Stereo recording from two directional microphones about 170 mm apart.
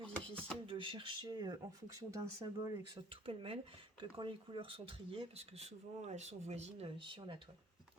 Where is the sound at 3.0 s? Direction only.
30° right (ahead or behind).